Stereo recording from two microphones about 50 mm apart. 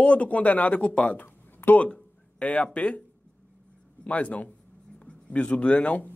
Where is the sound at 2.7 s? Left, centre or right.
Left.